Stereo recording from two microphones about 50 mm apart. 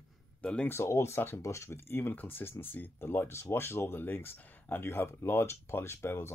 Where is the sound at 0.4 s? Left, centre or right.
Left.